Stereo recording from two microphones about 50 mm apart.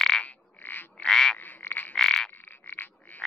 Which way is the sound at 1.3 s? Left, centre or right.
Left.